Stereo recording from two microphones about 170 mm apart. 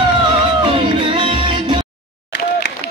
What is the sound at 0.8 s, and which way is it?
Music, 30° right (ahead or behind).